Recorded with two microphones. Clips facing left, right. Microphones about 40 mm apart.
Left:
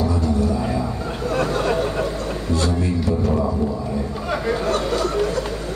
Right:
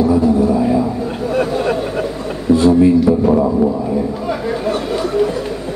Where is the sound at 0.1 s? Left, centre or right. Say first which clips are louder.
Right 8 dB; centre.